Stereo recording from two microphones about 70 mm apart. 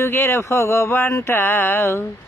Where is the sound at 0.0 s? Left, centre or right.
Left.